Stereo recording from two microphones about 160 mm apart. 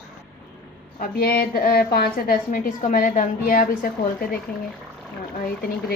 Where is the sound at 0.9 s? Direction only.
75° left (ahead or behind).